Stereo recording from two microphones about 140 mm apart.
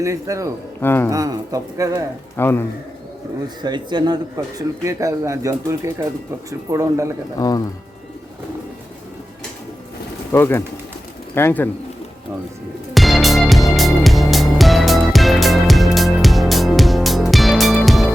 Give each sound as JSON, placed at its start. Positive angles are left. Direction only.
{"t": 0.0, "sound": "speech", "side_deg": -20}
{"t": 0.8, "sound": "speech", "side_deg": 15}
{"t": 1.1, "sound": "speech", "side_deg": -25}
{"t": 2.3, "sound": "speech", "side_deg": 15}
{"t": 3.6, "sound": "speech", "side_deg": -30}
{"t": 7.3, "sound": "speech", "side_deg": 25}
{"t": 10.3, "sound": "speech", "side_deg": 15}
{"t": 12.9, "sound": "music", "side_deg": 0}